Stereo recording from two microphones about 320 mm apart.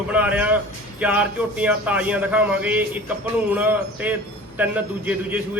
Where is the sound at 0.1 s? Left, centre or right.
Centre.